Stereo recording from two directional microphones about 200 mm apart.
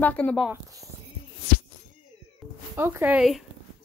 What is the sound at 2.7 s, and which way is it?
Speech, 10° right (ahead or behind).